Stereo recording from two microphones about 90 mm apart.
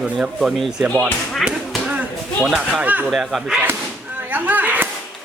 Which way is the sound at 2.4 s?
10° right (ahead or behind).